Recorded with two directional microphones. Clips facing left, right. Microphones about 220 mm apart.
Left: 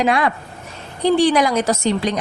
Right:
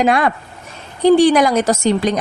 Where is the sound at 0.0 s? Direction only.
50° right (ahead or behind).